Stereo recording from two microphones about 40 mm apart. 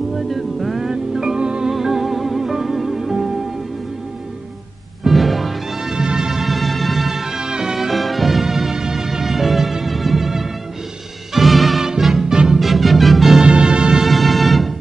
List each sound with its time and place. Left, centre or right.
0.1 s music: centre
0.8 s music: centre
1.7 s music: centre
5.0 s music: centre
5.8 s music: centre
6.4 s music: centre
7.9 s music: centre
12.5 s music: centre
13.4 s music: right
14.0 s music: centre